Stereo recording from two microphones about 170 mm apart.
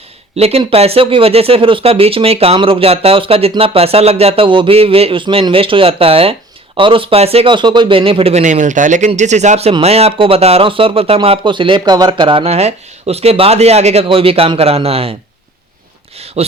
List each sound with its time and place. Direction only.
0.3 s speech: 35° right (ahead or behind)
16.1 s speech: 35° right (ahead or behind)